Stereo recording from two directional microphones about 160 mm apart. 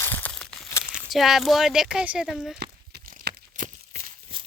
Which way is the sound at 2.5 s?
90° right.